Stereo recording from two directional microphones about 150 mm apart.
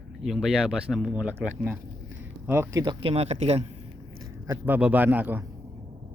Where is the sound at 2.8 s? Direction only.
35° right (ahead or behind).